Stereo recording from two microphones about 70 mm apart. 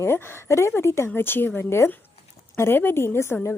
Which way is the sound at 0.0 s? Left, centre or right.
Left.